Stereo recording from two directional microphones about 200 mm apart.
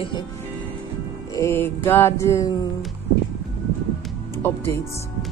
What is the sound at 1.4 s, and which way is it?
Speech, 10° left (ahead or behind).